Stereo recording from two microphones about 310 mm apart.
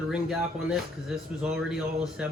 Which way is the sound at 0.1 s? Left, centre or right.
Centre.